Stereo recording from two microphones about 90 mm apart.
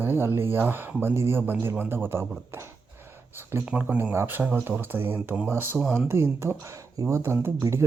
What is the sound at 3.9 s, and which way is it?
Speech, 20° right (ahead or behind).